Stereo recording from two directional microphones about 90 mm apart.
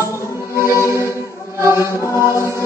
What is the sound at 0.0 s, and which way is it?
Music, 30° left (ahead or behind).